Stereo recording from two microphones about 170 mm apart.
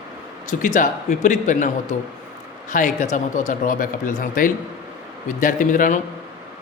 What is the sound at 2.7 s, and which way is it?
Speech, 50° left (ahead or behind).